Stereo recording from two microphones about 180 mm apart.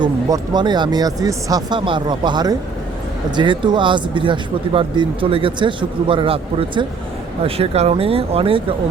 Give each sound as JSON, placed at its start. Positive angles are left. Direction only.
{"t": 0.0, "sound": "speech", "side_deg": -25}